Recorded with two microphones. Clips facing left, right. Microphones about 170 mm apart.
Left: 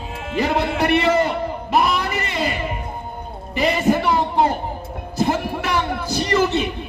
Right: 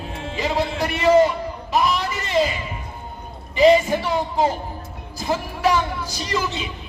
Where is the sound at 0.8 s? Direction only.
65° left (ahead or behind).